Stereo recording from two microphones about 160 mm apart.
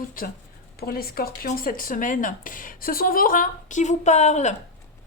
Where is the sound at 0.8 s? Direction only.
70° left (ahead or behind); by 4.5 s 45° left (ahead or behind).